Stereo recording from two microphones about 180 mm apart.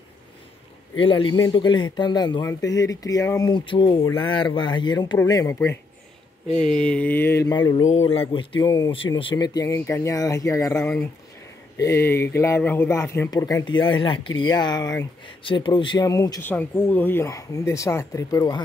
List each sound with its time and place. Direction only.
0.9 s speech: 30° left (ahead or behind)
6.5 s speech: 5° left (ahead or behind); by 7.8 s 20° left (ahead or behind)
7.8 s speech: 35° left (ahead or behind); by 18.6 s 20° left (ahead or behind)